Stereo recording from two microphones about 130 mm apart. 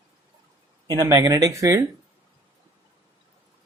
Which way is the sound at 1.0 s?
25° right (ahead or behind).